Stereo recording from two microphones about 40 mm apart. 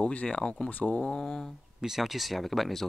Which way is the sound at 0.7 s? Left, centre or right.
Left.